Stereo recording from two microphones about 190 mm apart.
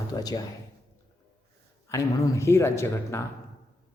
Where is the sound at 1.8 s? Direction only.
15° left (ahead or behind).